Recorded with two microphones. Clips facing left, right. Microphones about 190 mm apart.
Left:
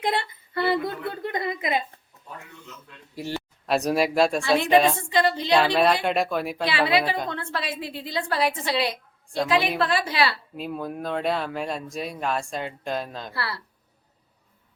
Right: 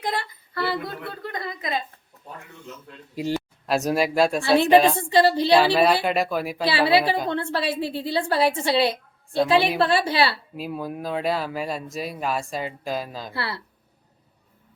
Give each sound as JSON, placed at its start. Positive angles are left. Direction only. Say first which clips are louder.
{"t": 0.0, "sound": "a woman's voice", "louder": "left 2 dB", "side_deg": 25}
{"t": 3.2, "sound": "speech", "louder": "right 5 dB", "side_deg": -15}
{"t": 3.7, "sound": "speech", "louder": "even", "side_deg": 0}
{"t": 4.9, "sound": "a woman's voice", "louder": "right 5 dB", "side_deg": -30}
{"t": 5.5, "sound": "speech", "louder": "right 2 dB", "side_deg": -5}
{"t": 6.7, "sound": "a woman's voice", "louder": "right 4 dB", "side_deg": -30}
{"t": 10.6, "sound": "speech", "louder": "even", "side_deg": -5}
{"t": 13.3, "sound": "a woman's voice", "louder": "right 2 dB", "side_deg": -25}